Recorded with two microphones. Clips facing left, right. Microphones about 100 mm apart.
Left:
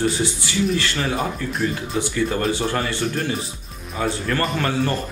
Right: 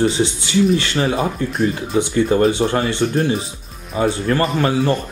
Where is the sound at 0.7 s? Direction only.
25° right (ahead or behind).